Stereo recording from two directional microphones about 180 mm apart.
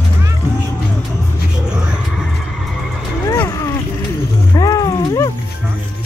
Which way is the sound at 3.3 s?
15° left (ahead or behind).